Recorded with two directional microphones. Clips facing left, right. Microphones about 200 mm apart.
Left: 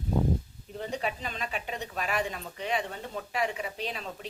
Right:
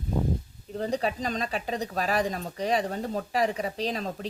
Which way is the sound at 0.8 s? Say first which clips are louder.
Right 5 dB; 35° right (ahead or behind).